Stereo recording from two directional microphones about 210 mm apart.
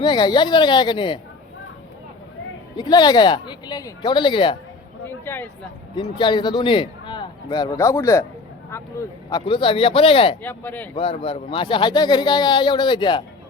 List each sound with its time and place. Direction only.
0.0 s a man's voice: 20° left (ahead or behind)
2.7 s a man's voice: 20° left (ahead or behind)
5.0 s speech: 10° left (ahead or behind)
6.0 s a man's voice: 20° left (ahead or behind)
9.5 s a man's voice: 25° left (ahead or behind)
10.4 s speech: 10° left (ahead or behind)
10.9 s a man's voice: 25° left (ahead or behind)